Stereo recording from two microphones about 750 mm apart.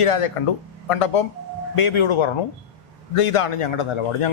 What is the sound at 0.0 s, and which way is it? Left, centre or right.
A man's voice, left.